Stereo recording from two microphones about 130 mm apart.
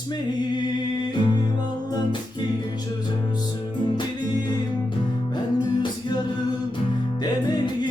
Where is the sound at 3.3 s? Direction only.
35° left (ahead or behind).